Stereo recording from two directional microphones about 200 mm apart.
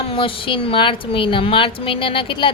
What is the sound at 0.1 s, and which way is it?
A woman's voice, 25° left (ahead or behind).